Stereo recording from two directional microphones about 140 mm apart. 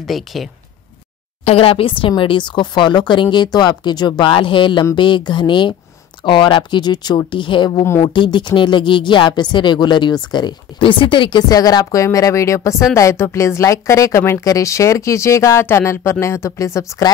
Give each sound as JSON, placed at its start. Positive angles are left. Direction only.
{"t": 0.0, "sound": "speech", "side_deg": 0}
{"t": 1.4, "sound": "speech", "side_deg": 45}
{"t": 7.8, "sound": "speech", "side_deg": 20}
{"t": 8.1, "sound": "speech", "side_deg": 35}